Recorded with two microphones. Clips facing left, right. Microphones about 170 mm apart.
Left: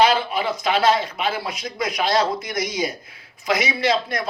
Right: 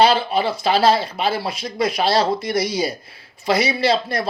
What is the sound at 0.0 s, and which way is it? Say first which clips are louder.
A man's voice: right 2 dB; 30° right (ahead or behind).